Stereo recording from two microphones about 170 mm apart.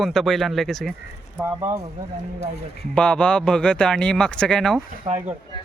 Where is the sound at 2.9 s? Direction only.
5° left (ahead or behind).